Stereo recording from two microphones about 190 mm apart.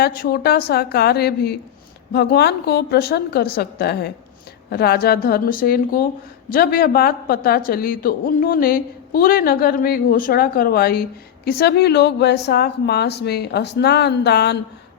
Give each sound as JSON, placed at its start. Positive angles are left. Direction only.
{"t": 0.0, "sound": "a woman's voice", "side_deg": 55}